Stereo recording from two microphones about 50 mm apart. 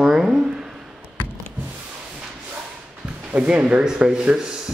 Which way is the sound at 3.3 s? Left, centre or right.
Right.